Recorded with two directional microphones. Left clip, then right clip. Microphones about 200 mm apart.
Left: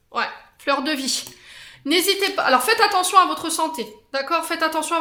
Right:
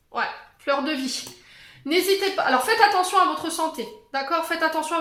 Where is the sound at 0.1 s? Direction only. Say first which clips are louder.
Left 2 dB; 40° left (ahead or behind).